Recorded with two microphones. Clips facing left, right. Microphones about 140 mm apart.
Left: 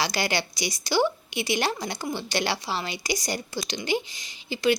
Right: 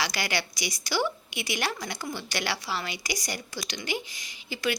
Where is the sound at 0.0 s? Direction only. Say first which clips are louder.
Left 4 dB; 30° left (ahead or behind).